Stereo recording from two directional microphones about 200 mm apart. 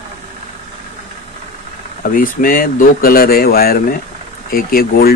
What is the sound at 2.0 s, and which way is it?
Speech, 45° left (ahead or behind).